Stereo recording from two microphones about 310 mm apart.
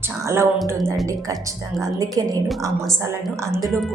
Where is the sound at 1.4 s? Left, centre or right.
Centre.